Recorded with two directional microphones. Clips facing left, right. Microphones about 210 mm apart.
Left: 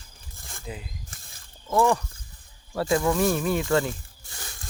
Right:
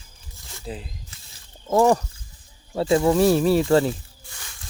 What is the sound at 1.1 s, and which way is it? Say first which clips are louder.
Wild animals: left 1 dB; 50° left (ahead or behind).